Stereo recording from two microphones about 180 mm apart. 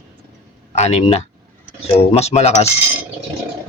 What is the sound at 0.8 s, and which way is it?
A man's voice, 35° left (ahead or behind).